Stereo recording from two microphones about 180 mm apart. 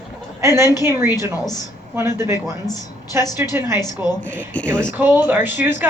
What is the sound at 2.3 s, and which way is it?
Speech, 20° left (ahead or behind).